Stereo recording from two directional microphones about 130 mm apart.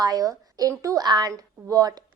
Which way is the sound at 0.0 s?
30° right (ahead or behind).